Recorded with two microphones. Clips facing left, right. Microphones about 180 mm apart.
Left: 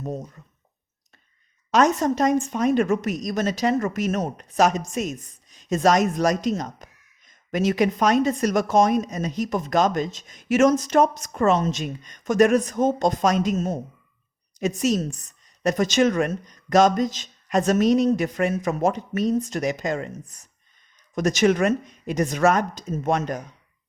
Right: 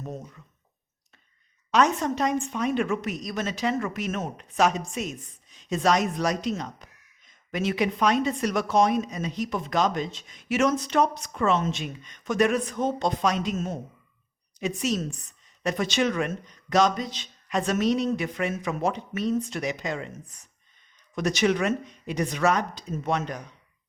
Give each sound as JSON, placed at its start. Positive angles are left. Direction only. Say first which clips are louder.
{"t": 1.7, "sound": "a woman's voice", "louder": "left 4 dB", "side_deg": 45}